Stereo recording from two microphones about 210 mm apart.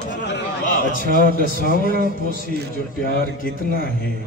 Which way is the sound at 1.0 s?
45° right (ahead or behind).